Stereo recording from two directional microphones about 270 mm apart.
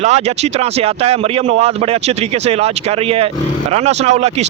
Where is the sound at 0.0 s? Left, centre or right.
Right.